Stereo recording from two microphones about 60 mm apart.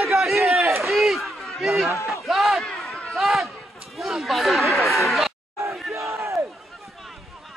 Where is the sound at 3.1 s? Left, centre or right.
Centre.